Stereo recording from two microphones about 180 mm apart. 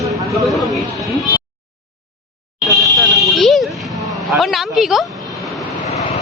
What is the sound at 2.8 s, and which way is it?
Alarm, centre (ahead or behind).